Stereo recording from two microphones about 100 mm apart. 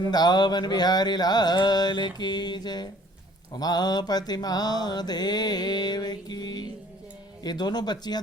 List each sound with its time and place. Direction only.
0.1 s mantra: 45° left (ahead or behind)